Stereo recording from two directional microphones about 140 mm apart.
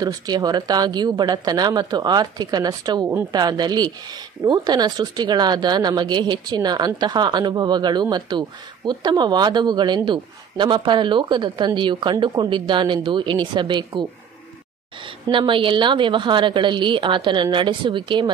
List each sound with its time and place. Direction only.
0.0 s a woman's voice: 30° right (ahead or behind)
15.2 s a woman's voice: 35° right (ahead or behind)